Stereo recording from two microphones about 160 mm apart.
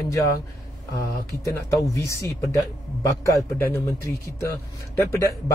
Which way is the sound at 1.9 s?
20° left (ahead or behind).